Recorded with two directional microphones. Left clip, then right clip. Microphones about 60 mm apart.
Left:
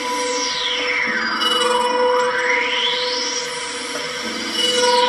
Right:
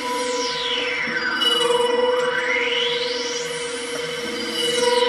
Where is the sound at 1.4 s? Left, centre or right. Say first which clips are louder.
Left 1 dB; left.